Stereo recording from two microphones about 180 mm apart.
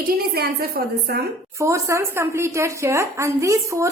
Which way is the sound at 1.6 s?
15° right (ahead or behind).